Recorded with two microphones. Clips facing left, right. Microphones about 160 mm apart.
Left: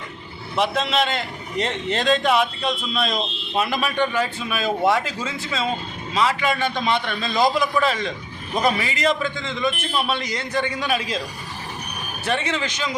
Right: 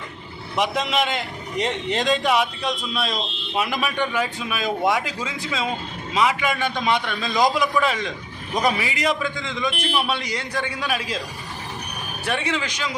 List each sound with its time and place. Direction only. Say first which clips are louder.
0.5 s a man's voice: left 1 dB; 15° right (ahead or behind)
12.2 s a man's voice: left 1 dB; 10° right (ahead or behind)